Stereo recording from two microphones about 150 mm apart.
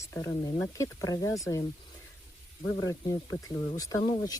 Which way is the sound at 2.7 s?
25° left (ahead or behind).